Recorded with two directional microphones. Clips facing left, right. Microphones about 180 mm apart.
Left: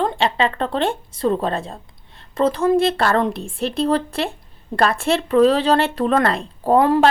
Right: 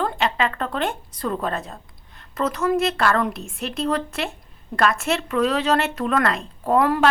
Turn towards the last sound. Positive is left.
turn(degrees=25)  # may be behind; listen again after turning